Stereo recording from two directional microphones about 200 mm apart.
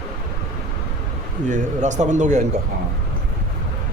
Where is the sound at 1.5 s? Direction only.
35° right (ahead or behind).